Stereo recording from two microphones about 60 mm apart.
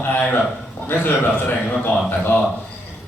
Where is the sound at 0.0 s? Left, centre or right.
Left.